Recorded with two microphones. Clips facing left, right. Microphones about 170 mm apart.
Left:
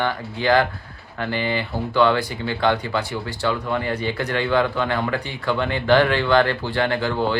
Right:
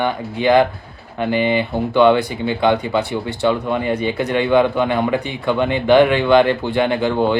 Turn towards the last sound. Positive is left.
turn(degrees=-20)  # may be behind; listen again after turning